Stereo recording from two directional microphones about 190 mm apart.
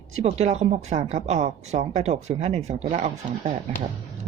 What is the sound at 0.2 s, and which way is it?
Speech, 35° right (ahead or behind).